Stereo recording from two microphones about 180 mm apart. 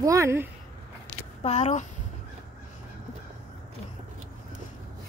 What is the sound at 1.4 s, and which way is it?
Speech, 40° left (ahead or behind).